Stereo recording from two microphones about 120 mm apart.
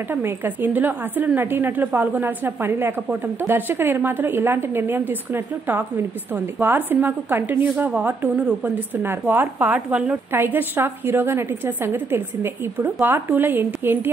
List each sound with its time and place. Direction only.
0.1 s a woman's voice: 20° right (ahead or behind)